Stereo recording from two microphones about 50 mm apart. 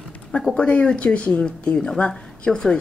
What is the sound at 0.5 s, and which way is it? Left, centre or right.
Speech, left.